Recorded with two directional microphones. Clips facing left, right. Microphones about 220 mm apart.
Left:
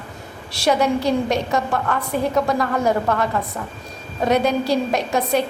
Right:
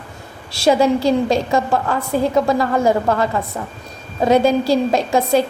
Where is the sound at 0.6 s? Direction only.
30° right (ahead or behind).